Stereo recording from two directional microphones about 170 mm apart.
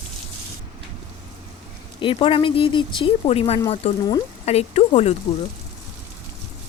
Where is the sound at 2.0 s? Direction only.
30° left (ahead or behind).